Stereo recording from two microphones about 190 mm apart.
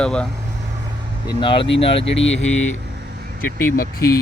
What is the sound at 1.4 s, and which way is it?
Speech, 25° left (ahead or behind).